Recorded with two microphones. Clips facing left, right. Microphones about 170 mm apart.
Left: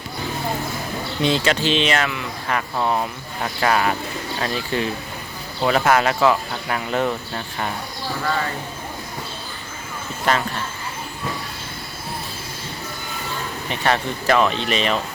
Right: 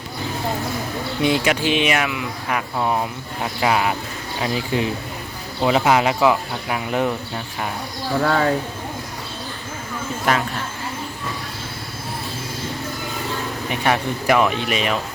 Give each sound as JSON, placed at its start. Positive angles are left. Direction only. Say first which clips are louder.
{"t": 1.2, "sound": "speech", "louder": "right 1 dB", "side_deg": -15}
{"t": 8.2, "sound": "speech", "louder": "right 5 dB", "side_deg": -65}
{"t": 13.7, "sound": "speech", "louder": "right 1 dB", "side_deg": -10}